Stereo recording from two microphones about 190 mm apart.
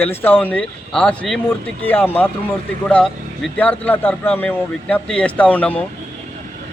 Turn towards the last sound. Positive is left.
turn(degrees=10)  # may be behind; listen again after turning